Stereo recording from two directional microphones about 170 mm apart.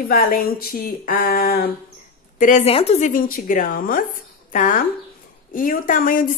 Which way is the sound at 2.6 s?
35° left (ahead or behind).